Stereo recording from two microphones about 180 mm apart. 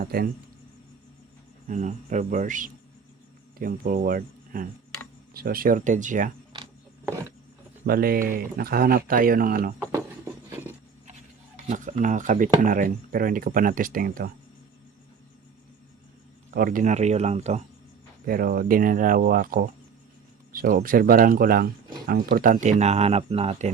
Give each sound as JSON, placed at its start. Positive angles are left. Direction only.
{"t": 0.0, "sound": "speech", "side_deg": -55}
{"t": 1.6, "sound": "speech", "side_deg": -45}
{"t": 7.9, "sound": "speech", "side_deg": -55}
{"t": 10.5, "sound": "a sound", "side_deg": -10}
{"t": 11.7, "sound": "speech", "side_deg": -45}
{"t": 16.5, "sound": "speech", "side_deg": -50}
{"t": 18.3, "sound": "speech", "side_deg": -50}